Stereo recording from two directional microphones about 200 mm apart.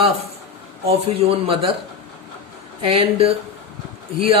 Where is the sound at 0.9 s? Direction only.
30° right (ahead or behind).